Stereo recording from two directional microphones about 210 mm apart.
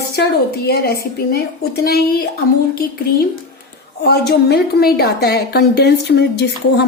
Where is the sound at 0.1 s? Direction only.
50° left (ahead or behind).